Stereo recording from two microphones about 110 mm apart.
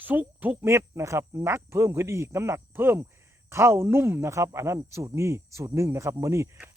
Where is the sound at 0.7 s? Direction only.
25° right (ahead or behind).